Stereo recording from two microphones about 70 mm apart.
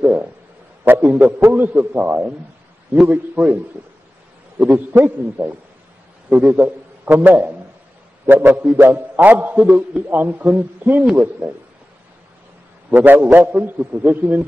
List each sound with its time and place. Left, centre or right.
0.0 s a sound: right
0.8 s a man's voice: right
4.6 s a man's voice: right
12.9 s a man's voice: right